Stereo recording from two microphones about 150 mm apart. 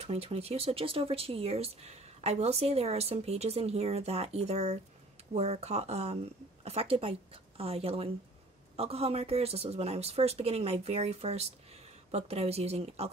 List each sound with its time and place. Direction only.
0.0 s a woman's voice: 45° right (ahead or behind)